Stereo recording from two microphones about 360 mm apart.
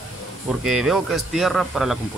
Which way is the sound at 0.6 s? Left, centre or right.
Centre.